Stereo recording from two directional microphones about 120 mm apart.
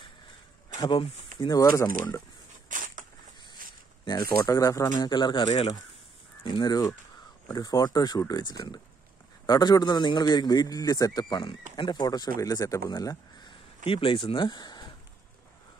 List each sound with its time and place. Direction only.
0.7 s a man's voice: 40° left (ahead or behind)
2.7 s a sound: 90° right
4.1 s a man's voice: 30° left (ahead or behind)
13.8 s speech: 50° left (ahead or behind)